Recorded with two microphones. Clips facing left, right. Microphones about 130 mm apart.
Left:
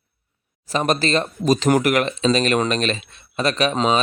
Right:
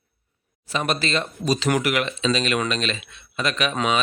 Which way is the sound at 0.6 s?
40° left (ahead or behind).